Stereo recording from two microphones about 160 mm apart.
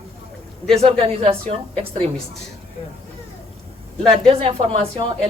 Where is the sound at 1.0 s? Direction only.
35° right (ahead or behind).